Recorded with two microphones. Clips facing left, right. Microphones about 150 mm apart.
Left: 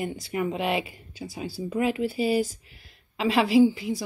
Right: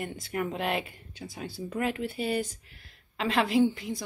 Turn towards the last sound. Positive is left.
turn(degrees=5)  # may be behind; listen again after turning